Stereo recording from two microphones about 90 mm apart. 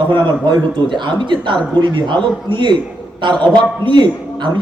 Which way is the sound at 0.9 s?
60° right (ahead or behind).